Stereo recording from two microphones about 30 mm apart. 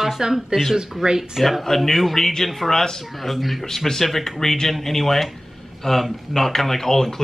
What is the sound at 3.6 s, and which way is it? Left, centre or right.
Speech, centre.